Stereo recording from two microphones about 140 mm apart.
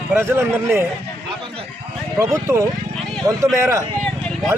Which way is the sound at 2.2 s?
20° right (ahead or behind).